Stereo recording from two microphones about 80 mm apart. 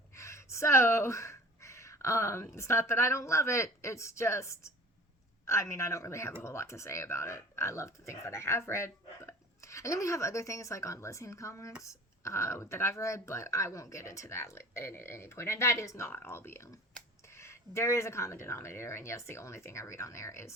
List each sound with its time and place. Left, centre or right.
0.1 s speech: left